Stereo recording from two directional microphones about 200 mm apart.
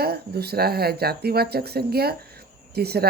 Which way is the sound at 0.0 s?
50° right (ahead or behind).